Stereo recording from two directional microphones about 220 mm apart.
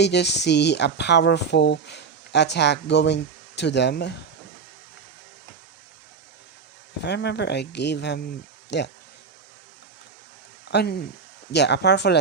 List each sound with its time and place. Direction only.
0.0 s speech: 50° left (ahead or behind)
7.0 s speech: 50° left (ahead or behind)
10.7 s speech: 50° left (ahead or behind)